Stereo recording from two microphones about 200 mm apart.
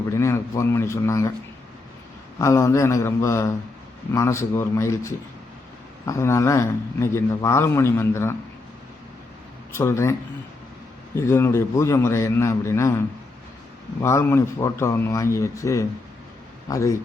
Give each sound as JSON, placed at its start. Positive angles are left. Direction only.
{"t": 0.1, "sound": "speech", "side_deg": 15}
{"t": 2.4, "sound": "a man's voice", "side_deg": 15}
{"t": 9.7, "sound": "a man's voice", "side_deg": 15}
{"t": 14.0, "sound": "a man's voice", "side_deg": 15}